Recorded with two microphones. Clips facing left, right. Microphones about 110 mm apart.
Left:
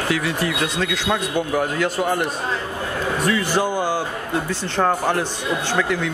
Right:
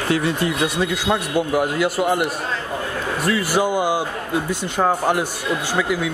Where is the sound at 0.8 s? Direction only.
10° right (ahead or behind).